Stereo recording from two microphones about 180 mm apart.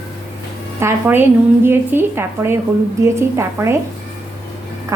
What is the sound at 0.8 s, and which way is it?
Speech, 15° right (ahead or behind).